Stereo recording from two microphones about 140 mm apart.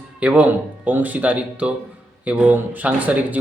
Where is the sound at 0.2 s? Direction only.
10° right (ahead or behind).